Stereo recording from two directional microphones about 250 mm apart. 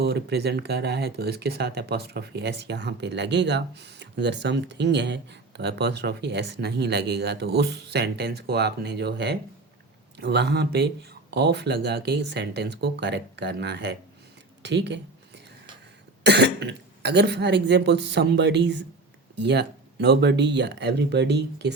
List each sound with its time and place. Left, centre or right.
0.0 s speech: right
16.2 s speech: right